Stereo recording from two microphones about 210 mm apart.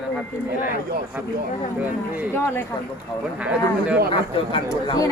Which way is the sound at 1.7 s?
5° right (ahead or behind).